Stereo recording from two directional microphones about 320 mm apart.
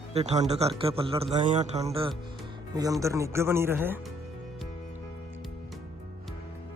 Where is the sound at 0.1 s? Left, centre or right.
Centre.